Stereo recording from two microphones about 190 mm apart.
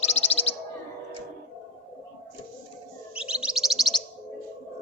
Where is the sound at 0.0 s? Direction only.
35° left (ahead or behind).